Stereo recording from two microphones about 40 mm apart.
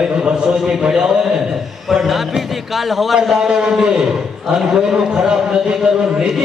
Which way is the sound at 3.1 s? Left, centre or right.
Centre.